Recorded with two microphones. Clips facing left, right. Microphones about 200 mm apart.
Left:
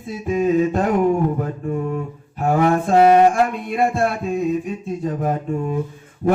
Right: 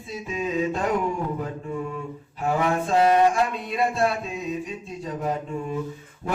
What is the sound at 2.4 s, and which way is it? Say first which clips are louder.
Mantra: left 6 dB; 50° left (ahead or behind).